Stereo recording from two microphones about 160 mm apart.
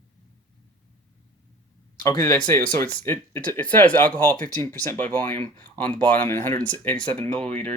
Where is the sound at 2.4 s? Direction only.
10° left (ahead or behind).